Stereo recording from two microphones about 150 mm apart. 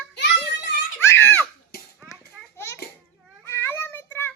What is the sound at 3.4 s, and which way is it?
Child singing, 15° left (ahead or behind).